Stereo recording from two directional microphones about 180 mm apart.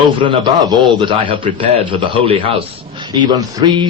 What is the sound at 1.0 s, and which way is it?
A man's voice, 25° right (ahead or behind).